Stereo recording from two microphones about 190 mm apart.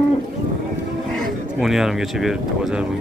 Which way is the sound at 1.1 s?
Centre (ahead or behind).